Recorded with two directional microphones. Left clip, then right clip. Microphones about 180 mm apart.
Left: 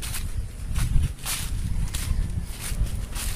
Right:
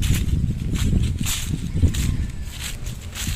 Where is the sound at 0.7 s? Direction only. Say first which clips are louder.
Right 6 dB; centre (ahead or behind).